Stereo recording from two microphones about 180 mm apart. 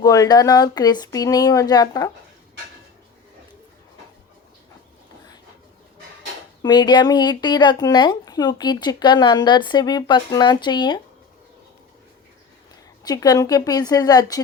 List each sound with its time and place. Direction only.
0.0 s speech: 20° left (ahead or behind)
6.6 s speech: 25° left (ahead or behind)
13.1 s speech: 20° left (ahead or behind)